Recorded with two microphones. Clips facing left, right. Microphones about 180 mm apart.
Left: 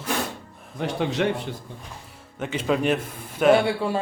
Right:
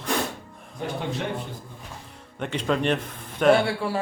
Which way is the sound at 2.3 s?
5° left (ahead or behind).